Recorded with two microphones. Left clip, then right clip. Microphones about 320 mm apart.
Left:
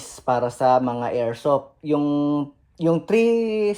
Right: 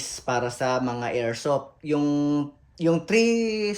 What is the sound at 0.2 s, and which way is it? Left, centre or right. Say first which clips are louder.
Speech: left 6 dB; centre.